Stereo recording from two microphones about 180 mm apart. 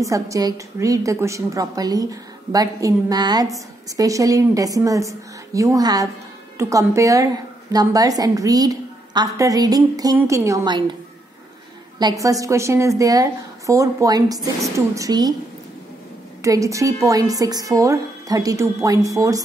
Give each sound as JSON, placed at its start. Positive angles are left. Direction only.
{"t": 0.0, "sound": "a woman's voice", "side_deg": -20}
{"t": 12.0, "sound": "a woman's voice", "side_deg": -20}
{"t": 16.4, "sound": "a woman's voice", "side_deg": -20}